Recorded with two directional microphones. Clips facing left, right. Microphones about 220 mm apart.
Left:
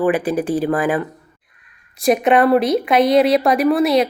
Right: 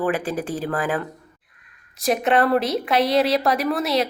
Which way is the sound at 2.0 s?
15° left (ahead or behind).